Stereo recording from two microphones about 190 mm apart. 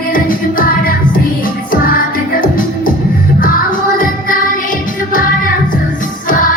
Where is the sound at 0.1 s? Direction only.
45° left (ahead or behind).